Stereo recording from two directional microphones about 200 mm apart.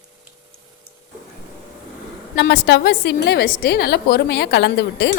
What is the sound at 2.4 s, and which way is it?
A woman's voice, 60° left (ahead or behind).